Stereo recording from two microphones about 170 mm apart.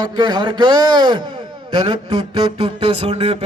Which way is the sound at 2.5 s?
35° right (ahead or behind).